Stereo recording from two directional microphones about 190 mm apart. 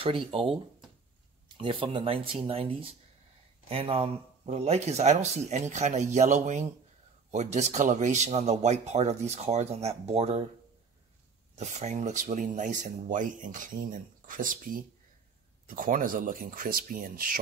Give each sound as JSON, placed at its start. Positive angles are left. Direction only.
{"t": 0.0, "sound": "speech", "side_deg": -30}
{"t": 1.6, "sound": "speech", "side_deg": -25}
{"t": 11.5, "sound": "speech", "side_deg": -35}